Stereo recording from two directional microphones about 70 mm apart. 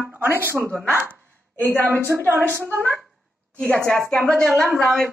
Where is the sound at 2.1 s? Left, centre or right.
Right.